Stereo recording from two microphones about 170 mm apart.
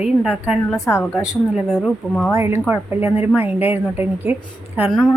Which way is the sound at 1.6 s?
Centre (ahead or behind).